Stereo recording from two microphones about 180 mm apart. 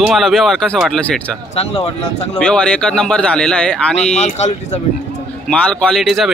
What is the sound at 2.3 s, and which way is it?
Speech, 5° left (ahead or behind).